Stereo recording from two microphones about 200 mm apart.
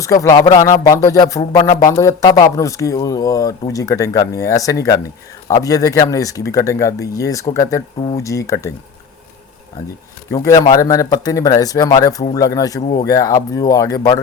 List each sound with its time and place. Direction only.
0.0 s speech: 15° left (ahead or behind)
1.4 s speech: 25° left (ahead or behind)
10.3 s speech: 15° left (ahead or behind)